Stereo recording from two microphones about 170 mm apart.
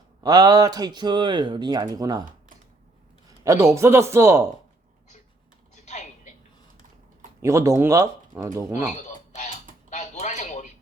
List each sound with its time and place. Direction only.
0.2 s speech: 25° right (ahead or behind)
3.2 s speech: 20° right (ahead or behind)
5.7 s typing: 45° left (ahead or behind)
7.4 s speech: 15° right (ahead or behind)
9.0 s a sound: 45° left (ahead or behind)
9.9 s dishes: 45° left (ahead or behind)